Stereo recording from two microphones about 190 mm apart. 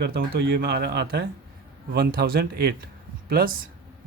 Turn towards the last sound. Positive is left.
turn(degrees=-50)  # may be behind; listen again after turning